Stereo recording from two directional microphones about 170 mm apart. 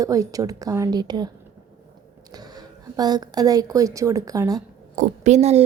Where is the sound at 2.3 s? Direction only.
25° right (ahead or behind).